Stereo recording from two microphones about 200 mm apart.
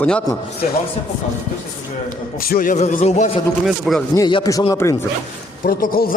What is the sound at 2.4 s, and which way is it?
A man's voice, 45° left (ahead or behind).